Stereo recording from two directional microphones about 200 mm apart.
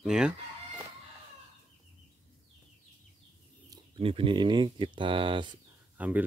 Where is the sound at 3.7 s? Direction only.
25° right (ahead or behind).